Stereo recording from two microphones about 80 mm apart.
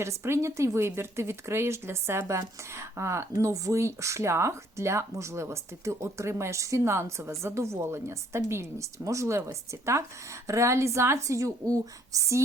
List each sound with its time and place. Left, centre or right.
0.0 s speech: right